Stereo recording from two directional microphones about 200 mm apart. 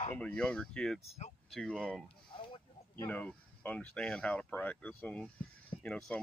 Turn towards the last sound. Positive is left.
turn(degrees=5)  # may be behind; listen again after turning